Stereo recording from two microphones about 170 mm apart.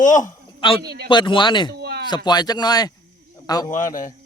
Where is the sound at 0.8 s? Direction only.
70° right (ahead or behind).